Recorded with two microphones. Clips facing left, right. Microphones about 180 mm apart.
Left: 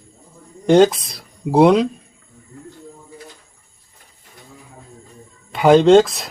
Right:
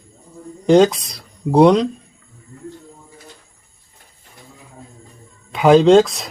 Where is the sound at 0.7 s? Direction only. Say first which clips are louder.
Even; centre (ahead or behind).